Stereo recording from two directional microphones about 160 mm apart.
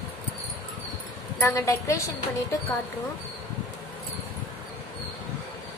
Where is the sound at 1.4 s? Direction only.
20° left (ahead or behind).